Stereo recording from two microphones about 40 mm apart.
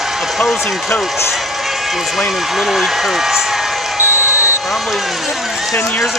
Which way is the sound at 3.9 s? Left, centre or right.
Right.